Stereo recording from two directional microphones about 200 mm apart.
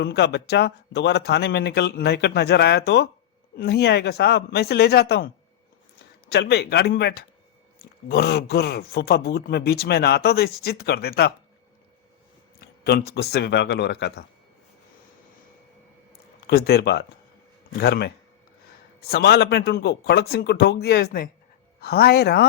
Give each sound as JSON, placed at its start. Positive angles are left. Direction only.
{"t": 0.0, "sound": "a man's voice", "side_deg": 55}
{"t": 12.5, "sound": "speech", "side_deg": 50}
{"t": 16.5, "sound": "a man's voice", "side_deg": 50}